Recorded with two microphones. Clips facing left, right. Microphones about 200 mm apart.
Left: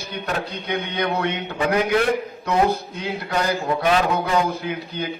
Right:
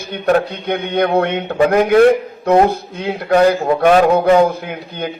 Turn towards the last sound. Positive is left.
turn(degrees=-55)  # may be behind; listen again after turning